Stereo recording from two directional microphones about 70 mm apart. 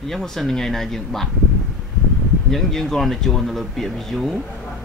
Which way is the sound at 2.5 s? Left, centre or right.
Centre.